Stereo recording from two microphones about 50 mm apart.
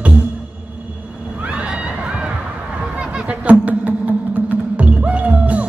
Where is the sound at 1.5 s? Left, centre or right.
Right.